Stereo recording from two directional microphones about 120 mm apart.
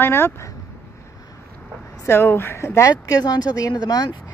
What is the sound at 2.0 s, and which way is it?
Speech, 20° left (ahead or behind).